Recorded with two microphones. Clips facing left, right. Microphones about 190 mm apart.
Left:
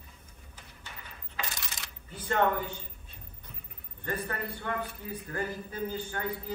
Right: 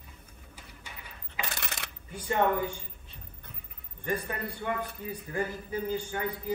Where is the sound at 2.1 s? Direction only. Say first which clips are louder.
Right 1 dB; 15° right (ahead or behind).